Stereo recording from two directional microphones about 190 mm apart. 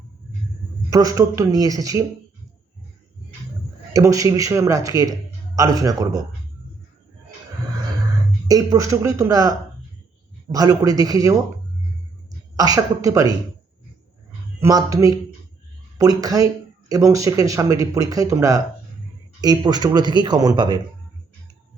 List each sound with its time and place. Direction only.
0.9 s speech: 20° right (ahead or behind)
3.9 s speech: 15° right (ahead or behind)
8.4 s speech: 20° right (ahead or behind)
12.5 s speech: 20° right (ahead or behind)
14.6 s speech: 20° right (ahead or behind)